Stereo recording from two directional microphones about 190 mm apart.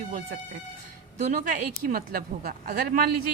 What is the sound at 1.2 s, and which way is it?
Speech, 45° right (ahead or behind).